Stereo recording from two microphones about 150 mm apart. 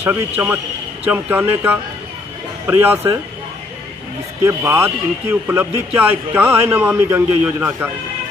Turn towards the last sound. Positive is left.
turn(degrees=-10)  # may be behind; listen again after turning